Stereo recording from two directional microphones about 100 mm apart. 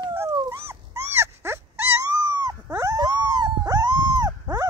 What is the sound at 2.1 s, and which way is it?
Dog, 35° right (ahead or behind).